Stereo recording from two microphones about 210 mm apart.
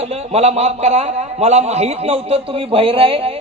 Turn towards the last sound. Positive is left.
turn(degrees=-25)  # may be behind; listen again after turning